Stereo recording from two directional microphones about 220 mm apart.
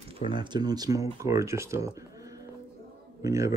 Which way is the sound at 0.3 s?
20° right (ahead or behind).